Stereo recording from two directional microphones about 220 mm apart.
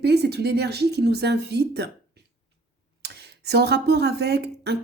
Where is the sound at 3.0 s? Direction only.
50° right (ahead or behind).